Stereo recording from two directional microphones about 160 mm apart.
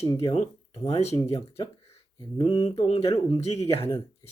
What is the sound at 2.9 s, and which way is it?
Speech, 40° left (ahead or behind).